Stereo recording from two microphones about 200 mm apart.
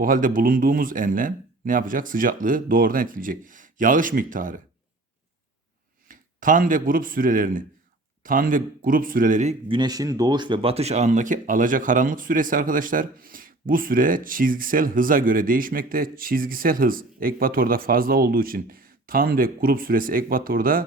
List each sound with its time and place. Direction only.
0.0 s speech: 45° right (ahead or behind)
6.1 s speech: 45° right (ahead or behind)
9.7 s speech: 20° right (ahead or behind); by 20.8 s 45° right (ahead or behind)